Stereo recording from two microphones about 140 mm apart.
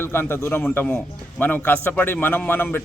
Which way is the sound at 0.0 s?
15° left (ahead or behind).